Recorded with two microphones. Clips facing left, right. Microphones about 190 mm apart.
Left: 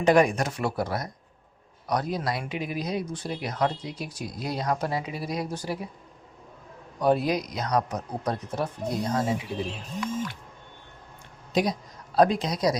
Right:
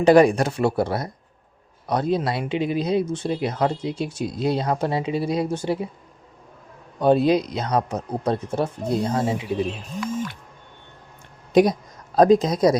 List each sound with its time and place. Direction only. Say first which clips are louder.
0.0 s speech: right 6 dB; 30° right (ahead or behind)
7.0 s speech: right 6 dB; 25° right (ahead or behind)
11.5 s speech: right 9 dB; 55° right (ahead or behind)